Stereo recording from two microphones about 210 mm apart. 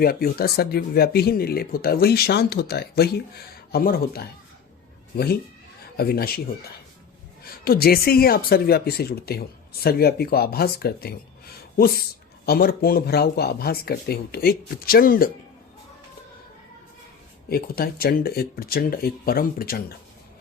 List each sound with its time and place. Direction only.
0.0 s speech: 45° left (ahead or behind)
7.4 s speech: 45° left (ahead or behind)
17.5 s speech: 45° left (ahead or behind)